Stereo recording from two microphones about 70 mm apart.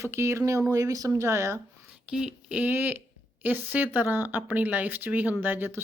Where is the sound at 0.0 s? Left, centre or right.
Right.